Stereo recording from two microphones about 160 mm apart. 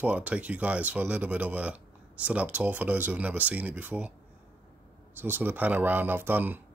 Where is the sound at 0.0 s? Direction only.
10° right (ahead or behind).